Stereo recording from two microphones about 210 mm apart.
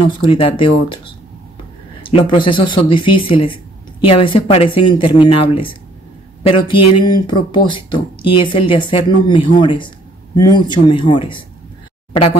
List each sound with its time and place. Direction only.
0.0 s speech: 25° left (ahead or behind)
2.0 s speech: 25° left (ahead or behind)